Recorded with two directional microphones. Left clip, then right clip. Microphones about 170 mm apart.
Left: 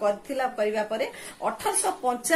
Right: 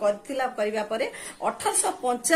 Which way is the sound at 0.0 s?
10° right (ahead or behind).